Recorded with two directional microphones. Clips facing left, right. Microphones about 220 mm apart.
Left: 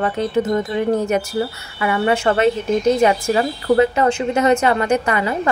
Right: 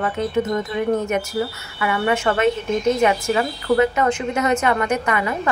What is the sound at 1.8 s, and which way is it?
A woman's voice, 30° left (ahead or behind).